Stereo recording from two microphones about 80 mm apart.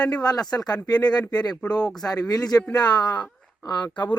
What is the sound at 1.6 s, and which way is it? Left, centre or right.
Speech, centre.